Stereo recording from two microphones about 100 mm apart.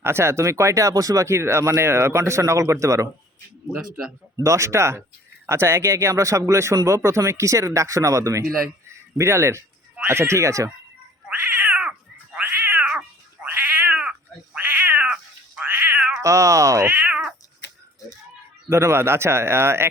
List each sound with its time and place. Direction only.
0.0 s speech: 25° right (ahead or behind)
4.4 s speech: 30° right (ahead or behind)
11.3 s cat: 15° right (ahead or behind)
16.2 s speech: 30° right (ahead or behind)
16.8 s cat: 15° right (ahead or behind)
18.7 s speech: 25° right (ahead or behind)